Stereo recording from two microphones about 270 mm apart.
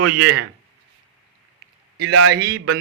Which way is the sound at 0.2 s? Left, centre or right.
Right.